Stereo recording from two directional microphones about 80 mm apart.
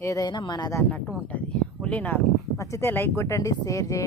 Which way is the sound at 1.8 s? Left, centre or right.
Centre.